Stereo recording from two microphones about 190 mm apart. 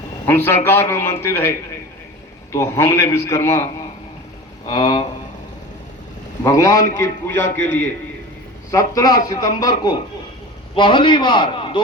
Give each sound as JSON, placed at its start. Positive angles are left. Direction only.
{"t": 0.3, "sound": "a man's voice", "side_deg": 10}
{"t": 6.4, "sound": "a man's voice", "side_deg": 15}